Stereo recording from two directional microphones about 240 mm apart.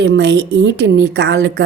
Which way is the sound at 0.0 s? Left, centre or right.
Right.